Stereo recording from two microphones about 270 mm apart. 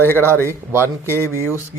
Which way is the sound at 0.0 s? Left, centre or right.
Centre.